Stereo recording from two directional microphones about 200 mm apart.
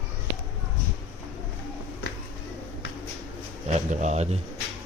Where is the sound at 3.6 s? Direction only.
35° right (ahead or behind).